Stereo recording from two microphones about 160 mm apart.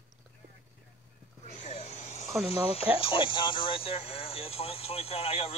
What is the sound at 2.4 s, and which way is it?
Speech, 40° left (ahead or behind).